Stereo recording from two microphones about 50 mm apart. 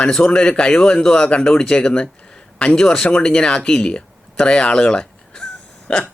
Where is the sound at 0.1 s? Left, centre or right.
Centre.